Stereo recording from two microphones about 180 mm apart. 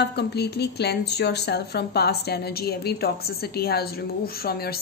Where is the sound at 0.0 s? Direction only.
65° left (ahead or behind).